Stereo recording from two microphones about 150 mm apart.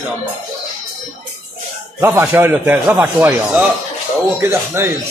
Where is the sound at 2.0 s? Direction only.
15° right (ahead or behind).